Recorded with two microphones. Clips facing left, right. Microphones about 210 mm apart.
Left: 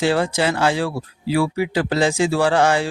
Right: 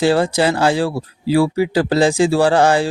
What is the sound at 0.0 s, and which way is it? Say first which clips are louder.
Speech: right 4 dB; 35° right (ahead or behind).